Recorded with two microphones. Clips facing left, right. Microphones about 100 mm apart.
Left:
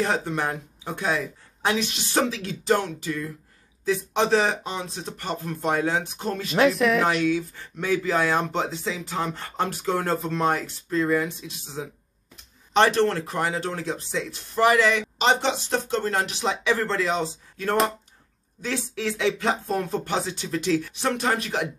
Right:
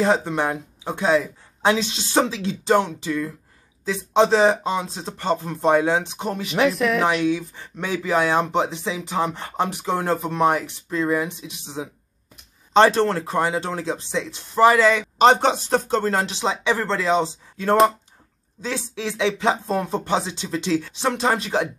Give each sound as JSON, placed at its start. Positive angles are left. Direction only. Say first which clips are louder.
{"t": 0.0, "sound": "speech", "louder": "right 5 dB", "side_deg": -25}
{"t": 6.6, "sound": "speech", "louder": "even", "side_deg": 0}
{"t": 7.2, "sound": "speech", "louder": "right 2 dB", "side_deg": -20}
{"t": 12.7, "sound": "speech", "louder": "right 4 dB", "side_deg": -35}